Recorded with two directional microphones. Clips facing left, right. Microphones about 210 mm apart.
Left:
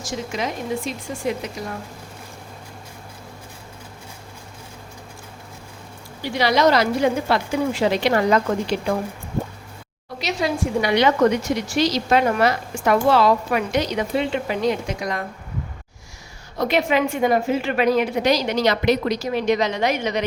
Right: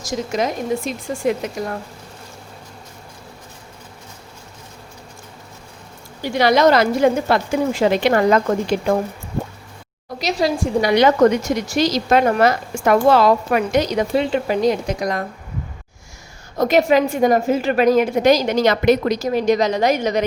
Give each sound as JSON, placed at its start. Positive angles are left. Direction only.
{"t": 0.0, "sound": "speech", "side_deg": -40}
{"t": 6.2, "sound": "a woman's voice", "side_deg": -50}
{"t": 10.2, "sound": "a woman's voice", "side_deg": -40}
{"t": 16.6, "sound": "a woman's voice", "side_deg": -45}